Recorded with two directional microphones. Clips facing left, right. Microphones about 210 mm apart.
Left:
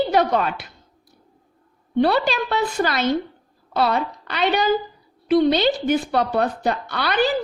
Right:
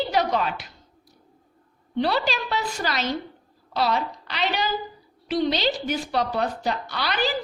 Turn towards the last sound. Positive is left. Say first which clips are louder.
# left 5 dB
turn(degrees=55)  # may be behind; listen again after turning